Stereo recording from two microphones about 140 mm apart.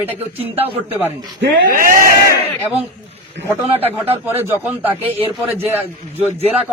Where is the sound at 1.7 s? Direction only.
80° right.